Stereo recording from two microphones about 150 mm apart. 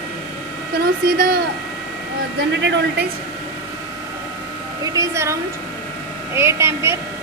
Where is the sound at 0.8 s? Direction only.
85° right.